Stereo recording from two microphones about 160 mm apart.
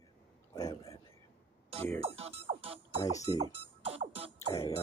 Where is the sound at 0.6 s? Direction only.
20° left (ahead or behind).